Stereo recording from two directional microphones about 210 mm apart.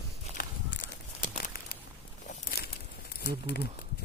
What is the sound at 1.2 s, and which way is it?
Crumpling, 45° left (ahead or behind).